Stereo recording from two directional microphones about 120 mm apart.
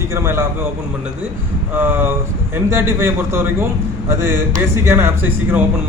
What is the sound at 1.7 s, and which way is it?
A man's voice, 15° right (ahead or behind).